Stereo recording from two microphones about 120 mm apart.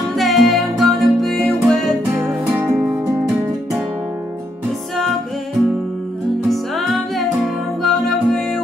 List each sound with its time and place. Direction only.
0.1 s music: centre (ahead or behind)
2.1 s music: 20° right (ahead or behind)
6.5 s music: centre (ahead or behind)